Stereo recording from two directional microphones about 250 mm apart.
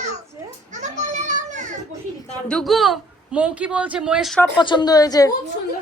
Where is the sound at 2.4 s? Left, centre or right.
Centre.